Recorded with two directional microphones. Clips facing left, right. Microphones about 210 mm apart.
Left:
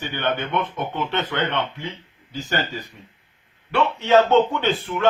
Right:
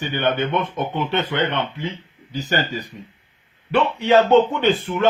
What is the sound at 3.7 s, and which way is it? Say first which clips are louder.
Speech: right 1 dB; 15° right (ahead or behind).